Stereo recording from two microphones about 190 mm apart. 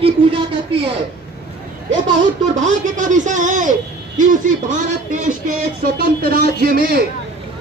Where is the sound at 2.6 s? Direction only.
40° right (ahead or behind).